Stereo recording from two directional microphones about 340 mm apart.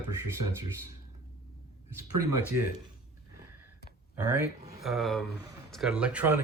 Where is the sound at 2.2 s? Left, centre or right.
Right.